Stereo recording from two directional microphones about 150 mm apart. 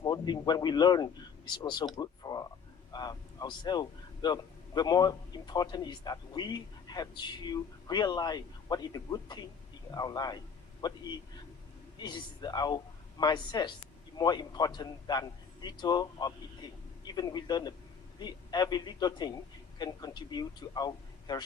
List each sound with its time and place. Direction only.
0.0 s speech: 25° left (ahead or behind)
2.0 s a sound: 25° left (ahead or behind)
2.9 s speech: 25° left (ahead or behind)
12.0 s speech: 30° left (ahead or behind)